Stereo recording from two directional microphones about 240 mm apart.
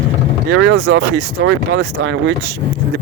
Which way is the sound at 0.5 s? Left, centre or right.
Right.